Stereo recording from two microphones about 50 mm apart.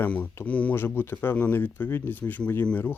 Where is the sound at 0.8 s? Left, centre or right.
Left.